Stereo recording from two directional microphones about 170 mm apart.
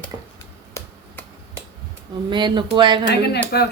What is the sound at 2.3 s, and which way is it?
Speech, 25° right (ahead or behind).